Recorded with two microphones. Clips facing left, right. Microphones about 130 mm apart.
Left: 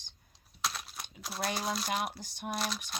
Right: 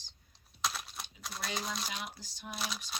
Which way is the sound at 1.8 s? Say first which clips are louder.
Left 8 dB; 60° left (ahead or behind).